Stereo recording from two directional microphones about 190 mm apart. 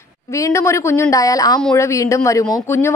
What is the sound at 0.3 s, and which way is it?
A man's voice, 15° left (ahead or behind).